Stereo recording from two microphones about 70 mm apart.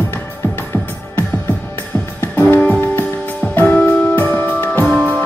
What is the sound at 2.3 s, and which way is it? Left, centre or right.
Music, left.